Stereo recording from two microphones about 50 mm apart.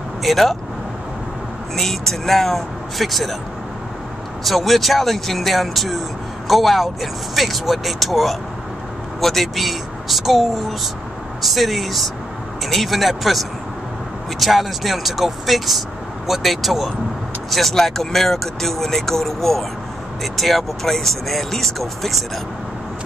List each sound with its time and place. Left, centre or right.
0.2 s speech: centre
1.8 s speech: centre
4.5 s speech: centre